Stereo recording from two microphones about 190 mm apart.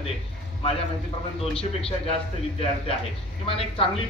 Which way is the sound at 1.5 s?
30° left (ahead or behind).